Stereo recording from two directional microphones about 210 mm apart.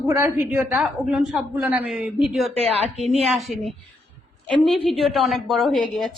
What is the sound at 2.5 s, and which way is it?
Speech, 30° right (ahead or behind).